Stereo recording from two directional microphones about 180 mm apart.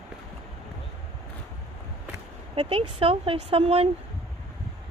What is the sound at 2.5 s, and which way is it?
Speech, 30° right (ahead or behind).